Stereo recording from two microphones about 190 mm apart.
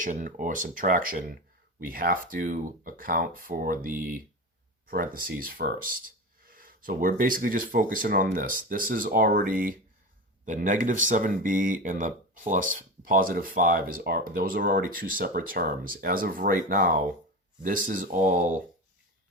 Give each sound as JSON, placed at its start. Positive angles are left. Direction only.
{"t": 0.0, "sound": "speech", "side_deg": -45}